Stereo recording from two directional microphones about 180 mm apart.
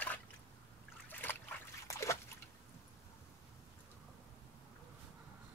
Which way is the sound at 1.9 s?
15° left (ahead or behind).